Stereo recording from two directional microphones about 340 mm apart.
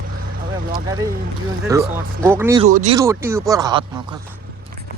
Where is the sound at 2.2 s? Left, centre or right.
Centre.